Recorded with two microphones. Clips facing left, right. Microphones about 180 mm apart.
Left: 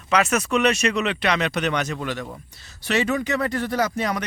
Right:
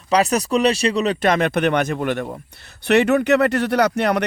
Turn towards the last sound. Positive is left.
turn(degrees=-65)  # may be behind; listen again after turning